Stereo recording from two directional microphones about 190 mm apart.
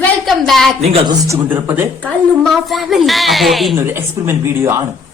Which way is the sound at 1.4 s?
10° right (ahead or behind).